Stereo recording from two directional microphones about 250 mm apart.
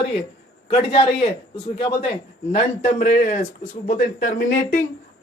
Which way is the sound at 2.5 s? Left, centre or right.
Left.